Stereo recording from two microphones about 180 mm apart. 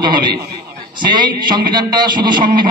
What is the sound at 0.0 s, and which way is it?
A man's voice, 25° right (ahead or behind).